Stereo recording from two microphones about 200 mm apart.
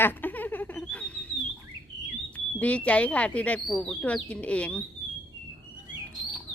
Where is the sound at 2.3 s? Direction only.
5° left (ahead or behind).